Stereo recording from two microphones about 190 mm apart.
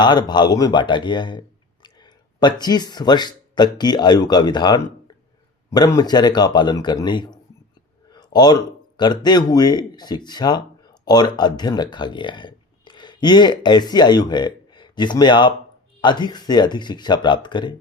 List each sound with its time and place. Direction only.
0.0 s speech: 25° left (ahead or behind)
8.1 s a sound: 20° left (ahead or behind)
9.0 s speech: 20° left (ahead or behind)